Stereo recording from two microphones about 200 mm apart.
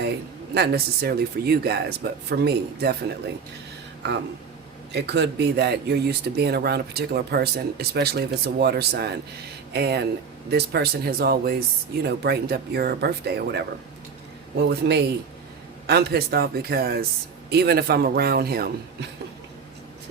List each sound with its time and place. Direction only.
0.5 s speech: 55° right (ahead or behind)
4.9 s speech: 55° right (ahead or behind)
14.7 s speech: 55° right (ahead or behind)